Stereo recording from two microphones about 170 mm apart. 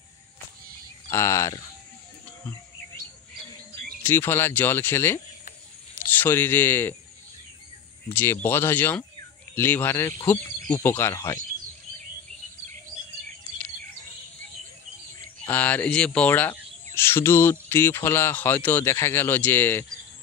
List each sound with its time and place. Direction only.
1.1 s speech: 15° left (ahead or behind)
4.0 s speech: 15° left (ahead or behind)
8.1 s speech: 15° left (ahead or behind)
15.5 s speech: 10° left (ahead or behind)